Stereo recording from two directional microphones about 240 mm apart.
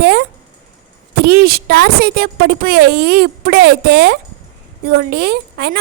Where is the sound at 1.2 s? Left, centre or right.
Right.